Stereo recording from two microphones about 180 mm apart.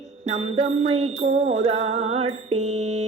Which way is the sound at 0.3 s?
35° right (ahead or behind).